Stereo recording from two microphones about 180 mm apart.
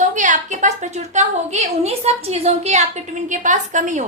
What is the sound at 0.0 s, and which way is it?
A woman's voice, 45° right (ahead or behind).